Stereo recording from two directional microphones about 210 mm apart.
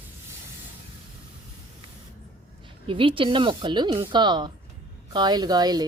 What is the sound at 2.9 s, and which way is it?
Speech, 25° right (ahead or behind).